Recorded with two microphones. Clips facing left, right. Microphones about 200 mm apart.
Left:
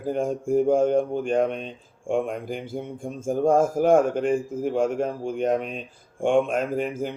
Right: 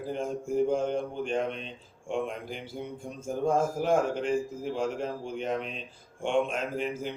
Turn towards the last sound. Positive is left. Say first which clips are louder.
# left 6 dB
turn(degrees=50)  # may be behind; listen again after turning